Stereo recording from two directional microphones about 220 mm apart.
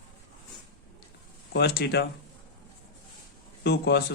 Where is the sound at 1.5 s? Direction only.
50° left (ahead or behind).